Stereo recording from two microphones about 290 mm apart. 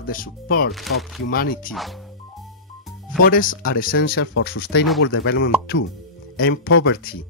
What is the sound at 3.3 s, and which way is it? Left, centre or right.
Speech, left.